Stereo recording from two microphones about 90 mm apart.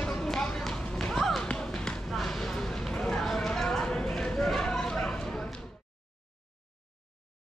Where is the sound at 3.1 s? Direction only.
5° left (ahead or behind).